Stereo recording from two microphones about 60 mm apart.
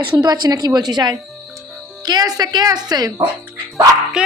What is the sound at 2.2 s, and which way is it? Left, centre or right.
A woman's voice, right.